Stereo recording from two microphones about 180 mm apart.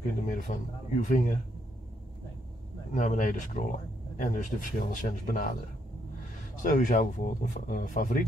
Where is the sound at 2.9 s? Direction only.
45° left (ahead or behind).